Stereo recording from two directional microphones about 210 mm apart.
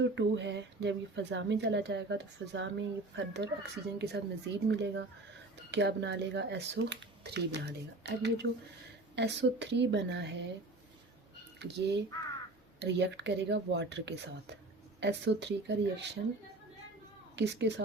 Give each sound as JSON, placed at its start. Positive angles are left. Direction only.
{"t": 0.0, "sound": "a woman's voice", "side_deg": -60}
{"t": 11.6, "sound": "a woman's voice", "side_deg": -55}
{"t": 17.3, "sound": "a woman's voice", "side_deg": -55}